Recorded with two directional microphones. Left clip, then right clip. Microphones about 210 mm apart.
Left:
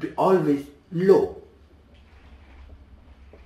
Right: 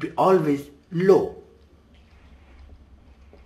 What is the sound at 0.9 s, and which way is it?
Speech, 20° right (ahead or behind).